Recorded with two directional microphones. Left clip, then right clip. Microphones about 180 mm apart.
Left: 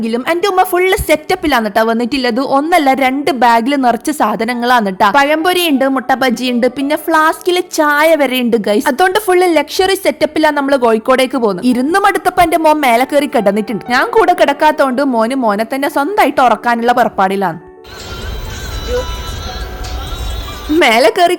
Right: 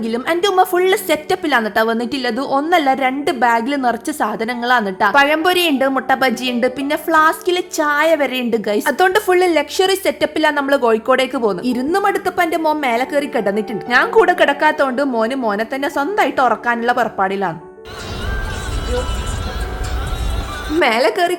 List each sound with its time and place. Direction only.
0.0 s a woman's voice: 30° left (ahead or behind)
11.6 s a woman's voice: 40° left (ahead or behind)
20.7 s a woman's voice: 40° left (ahead or behind)